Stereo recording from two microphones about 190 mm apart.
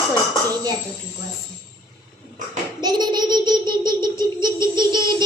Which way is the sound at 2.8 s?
20° right (ahead or behind).